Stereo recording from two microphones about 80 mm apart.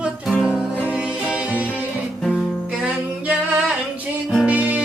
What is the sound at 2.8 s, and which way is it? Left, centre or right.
Music, centre.